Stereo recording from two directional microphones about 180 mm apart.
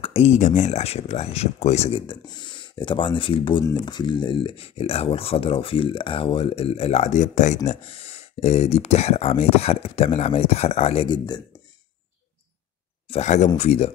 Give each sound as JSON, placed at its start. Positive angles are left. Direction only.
{"t": 0.0, "sound": "speech", "side_deg": 35}
{"t": 13.1, "sound": "speech", "side_deg": 40}